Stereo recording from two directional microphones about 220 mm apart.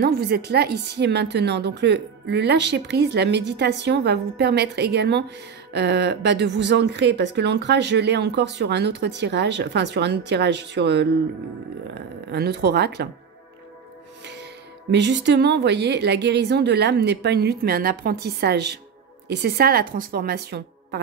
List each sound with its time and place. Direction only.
0.0 s speech: 45° right (ahead or behind)
14.2 s speech: 50° right (ahead or behind)